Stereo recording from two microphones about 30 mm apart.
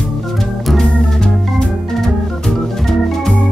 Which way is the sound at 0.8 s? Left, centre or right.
Left.